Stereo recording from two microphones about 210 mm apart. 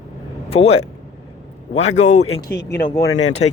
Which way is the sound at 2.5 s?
50° left (ahead or behind).